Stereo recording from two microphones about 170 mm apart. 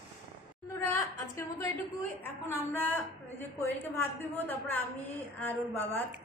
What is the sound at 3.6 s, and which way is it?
A woman's voice, 10° left (ahead or behind).